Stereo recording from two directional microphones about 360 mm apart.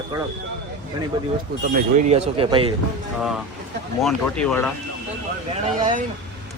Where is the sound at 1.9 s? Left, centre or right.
Centre.